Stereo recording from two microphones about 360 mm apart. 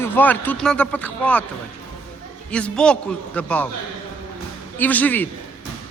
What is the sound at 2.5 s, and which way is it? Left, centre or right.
A man's voice, centre.